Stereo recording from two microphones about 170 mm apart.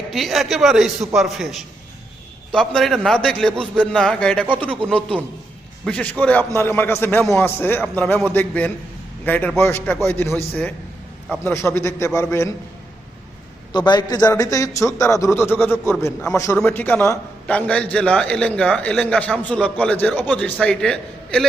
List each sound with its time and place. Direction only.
0.1 s a man's voice: centre (ahead or behind)
5.8 s a man's voice: 5° left (ahead or behind)
11.4 s a man's voice: 15° left (ahead or behind)
13.7 s a man's voice: 25° left (ahead or behind); by 21.4 s 5° left (ahead or behind)